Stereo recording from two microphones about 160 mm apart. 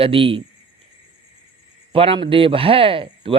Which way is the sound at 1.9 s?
35° right (ahead or behind).